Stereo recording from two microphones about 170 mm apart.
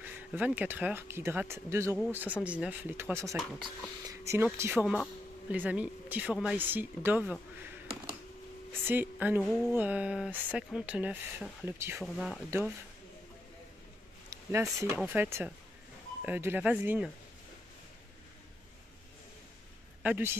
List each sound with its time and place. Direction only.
0.0 s speech: 10° right (ahead or behind)
8.8 s speech: 10° right (ahead or behind)
12.0 s speech: 5° right (ahead or behind)
14.3 s speech: 15° right (ahead or behind)
20.0 s a man's voice: 10° right (ahead or behind)